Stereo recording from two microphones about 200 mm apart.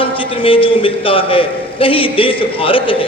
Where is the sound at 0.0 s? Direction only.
25° left (ahead or behind).